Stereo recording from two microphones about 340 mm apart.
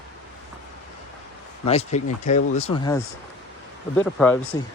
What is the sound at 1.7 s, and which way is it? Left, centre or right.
Speech, centre.